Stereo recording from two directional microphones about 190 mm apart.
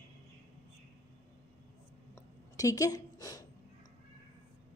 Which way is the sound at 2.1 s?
15° left (ahead or behind).